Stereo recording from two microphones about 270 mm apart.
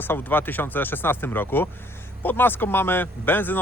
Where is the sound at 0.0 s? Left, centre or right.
Centre.